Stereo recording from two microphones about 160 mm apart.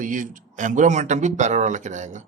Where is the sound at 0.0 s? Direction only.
55° right (ahead or behind).